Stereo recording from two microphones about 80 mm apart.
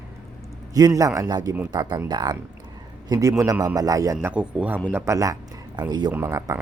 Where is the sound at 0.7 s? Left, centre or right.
Right.